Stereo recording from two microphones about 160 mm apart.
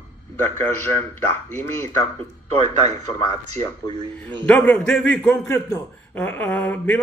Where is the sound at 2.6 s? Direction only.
45° right (ahead or behind).